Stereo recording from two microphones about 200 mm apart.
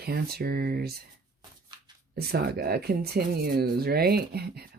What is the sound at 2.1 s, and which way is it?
Speech, 50° right (ahead or behind).